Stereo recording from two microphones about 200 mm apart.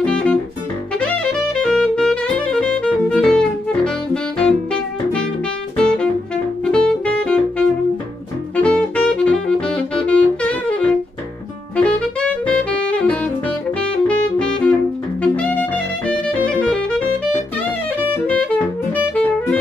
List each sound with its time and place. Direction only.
0.0 s music: 5° left (ahead or behind)
0.9 s saxophone: 5° left (ahead or behind)
15.2 s music: 5° left (ahead or behind)
18.1 s saxophone: 10° left (ahead or behind)